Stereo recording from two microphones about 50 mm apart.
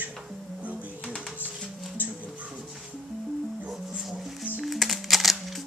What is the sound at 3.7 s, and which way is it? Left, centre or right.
Music, centre.